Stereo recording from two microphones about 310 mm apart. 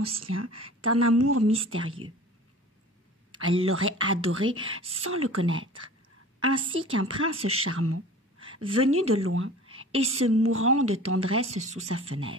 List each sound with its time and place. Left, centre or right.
0.2 s a woman's voice: right
3.3 s a woman's voice: right
7.4 s a sound: right
8.7 s a woman's voice: right